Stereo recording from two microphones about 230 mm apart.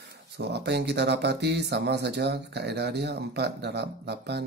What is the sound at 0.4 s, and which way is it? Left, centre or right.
Speech, right.